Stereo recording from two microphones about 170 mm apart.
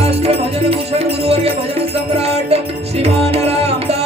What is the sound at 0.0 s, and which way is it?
Music, 35° right (ahead or behind).